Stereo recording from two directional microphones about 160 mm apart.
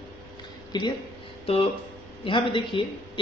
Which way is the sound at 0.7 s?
25° left (ahead or behind).